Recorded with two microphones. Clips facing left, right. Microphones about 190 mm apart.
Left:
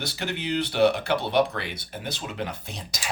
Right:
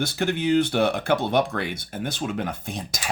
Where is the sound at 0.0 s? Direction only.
50° right (ahead or behind).